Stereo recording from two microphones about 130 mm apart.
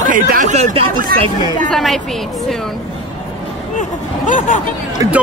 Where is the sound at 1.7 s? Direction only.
Centre (ahead or behind).